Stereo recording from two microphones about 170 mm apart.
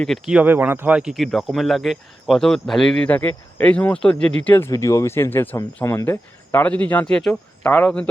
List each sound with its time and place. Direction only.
0.0 s speech: centre (ahead or behind)